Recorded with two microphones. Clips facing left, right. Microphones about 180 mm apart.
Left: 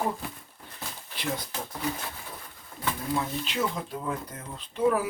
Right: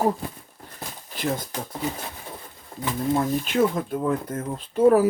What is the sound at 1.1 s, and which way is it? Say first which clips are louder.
Speech: right 6 dB; 45° right (ahead or behind).